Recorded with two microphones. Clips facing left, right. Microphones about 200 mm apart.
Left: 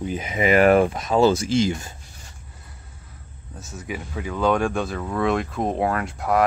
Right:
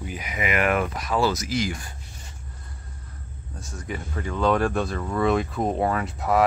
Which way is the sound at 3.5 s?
5° left (ahead or behind).